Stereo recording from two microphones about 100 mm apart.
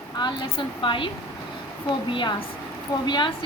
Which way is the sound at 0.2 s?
45° left (ahead or behind).